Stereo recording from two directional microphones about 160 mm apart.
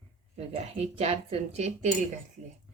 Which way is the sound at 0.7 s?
40° right (ahead or behind).